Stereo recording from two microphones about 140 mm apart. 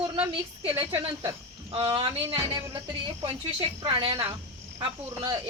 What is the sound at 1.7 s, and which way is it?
Speech, 40° right (ahead or behind).